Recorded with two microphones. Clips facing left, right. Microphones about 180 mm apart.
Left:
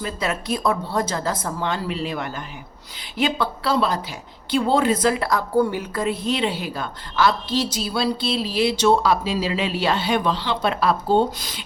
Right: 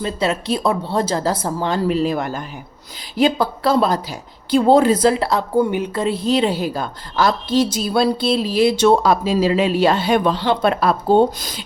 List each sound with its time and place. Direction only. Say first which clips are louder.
0.0 s a woman's voice: right 5 dB; 30° right (ahead or behind); by 11.6 s 45° right (ahead or behind)